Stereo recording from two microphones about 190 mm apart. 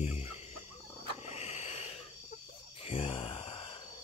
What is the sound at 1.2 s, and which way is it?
Owl, 35° left (ahead or behind).